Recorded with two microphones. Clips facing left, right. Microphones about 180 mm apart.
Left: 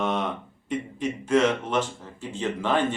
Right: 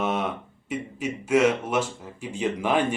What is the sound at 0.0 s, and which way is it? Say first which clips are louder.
Speech: even; 5° right (ahead or behind).